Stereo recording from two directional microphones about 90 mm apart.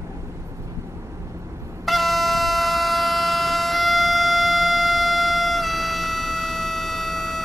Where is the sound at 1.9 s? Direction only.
Centre (ahead or behind).